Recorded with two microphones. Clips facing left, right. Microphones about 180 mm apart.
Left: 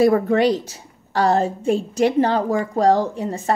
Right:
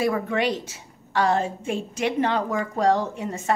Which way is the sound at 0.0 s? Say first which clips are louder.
Left 8 dB; 40° left (ahead or behind).